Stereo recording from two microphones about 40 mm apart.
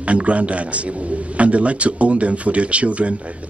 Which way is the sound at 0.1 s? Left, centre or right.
Right.